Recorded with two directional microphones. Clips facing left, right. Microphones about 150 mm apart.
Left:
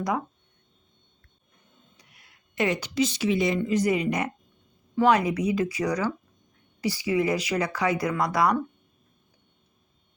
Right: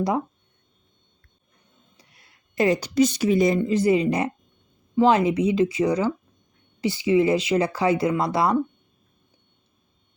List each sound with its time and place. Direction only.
2.0 s speech: 35° right (ahead or behind)